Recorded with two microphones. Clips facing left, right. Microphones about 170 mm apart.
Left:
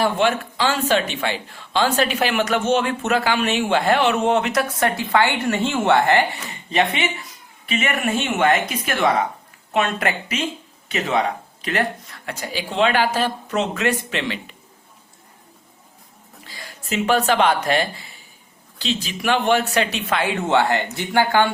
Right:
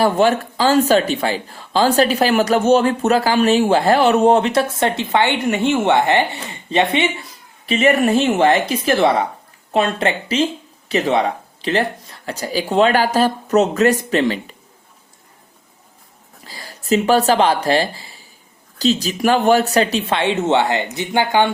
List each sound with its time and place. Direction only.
0.0 s a man's voice: 40° right (ahead or behind)
16.5 s speech: 35° right (ahead or behind); by 21.5 s 20° right (ahead or behind)